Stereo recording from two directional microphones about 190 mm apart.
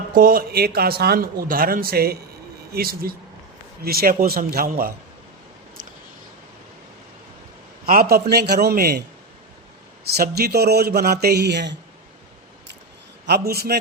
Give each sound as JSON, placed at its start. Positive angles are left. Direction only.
{"t": 0.1, "sound": "a man's voice", "side_deg": -50}
{"t": 7.9, "sound": "speech", "side_deg": -50}
{"t": 13.2, "sound": "speech", "side_deg": -55}